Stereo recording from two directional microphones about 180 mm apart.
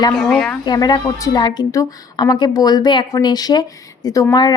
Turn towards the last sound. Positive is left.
turn(degrees=20)  # may be behind; listen again after turning